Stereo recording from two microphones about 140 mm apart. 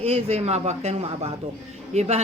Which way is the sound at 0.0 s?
45° right (ahead or behind).